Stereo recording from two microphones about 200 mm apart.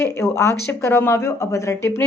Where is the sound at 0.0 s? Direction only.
15° left (ahead or behind).